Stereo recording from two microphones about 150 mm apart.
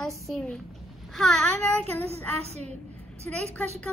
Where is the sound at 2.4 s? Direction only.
45° right (ahead or behind).